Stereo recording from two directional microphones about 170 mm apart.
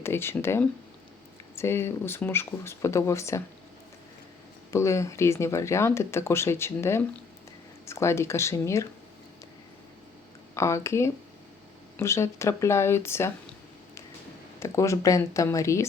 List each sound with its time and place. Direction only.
0.0 s speech: 15° left (ahead or behind)
4.7 s speech: 15° left (ahead or behind)
10.5 s speech: 15° left (ahead or behind)
14.6 s speech: 20° left (ahead or behind)